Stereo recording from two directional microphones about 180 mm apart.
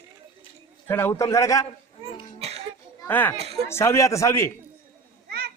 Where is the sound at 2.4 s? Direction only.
35° right (ahead or behind).